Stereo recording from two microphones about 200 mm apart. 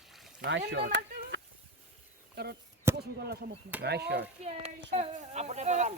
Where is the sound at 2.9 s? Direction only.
55° right (ahead or behind).